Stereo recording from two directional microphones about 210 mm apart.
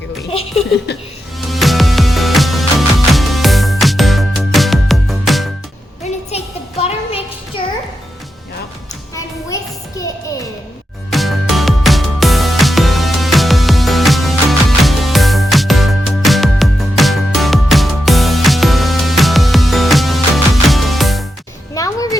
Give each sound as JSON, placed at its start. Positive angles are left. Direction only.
{"t": 0.9, "sound": "speech", "side_deg": 50}
{"t": 1.4, "sound": "music", "side_deg": 0}
{"t": 6.3, "sound": "music", "side_deg": 30}
{"t": 11.1, "sound": "music", "side_deg": 0}
{"t": 21.8, "sound": "music", "side_deg": 15}